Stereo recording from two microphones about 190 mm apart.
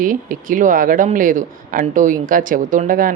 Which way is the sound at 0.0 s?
45° right (ahead or behind).